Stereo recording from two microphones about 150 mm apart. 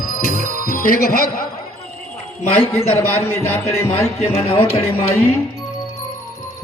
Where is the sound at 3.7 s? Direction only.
45° left (ahead or behind).